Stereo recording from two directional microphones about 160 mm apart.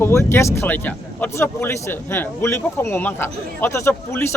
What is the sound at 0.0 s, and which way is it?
Speech, 15° left (ahead or behind).